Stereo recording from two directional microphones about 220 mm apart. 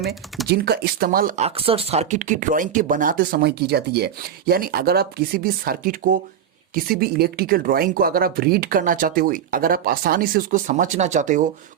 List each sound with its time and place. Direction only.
0.0 s speech: centre (ahead or behind)
0.5 s speech: 45° right (ahead or behind)